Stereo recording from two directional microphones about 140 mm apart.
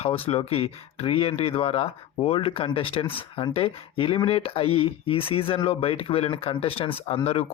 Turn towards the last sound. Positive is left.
turn(degrees=45)  # may be behind; listen again after turning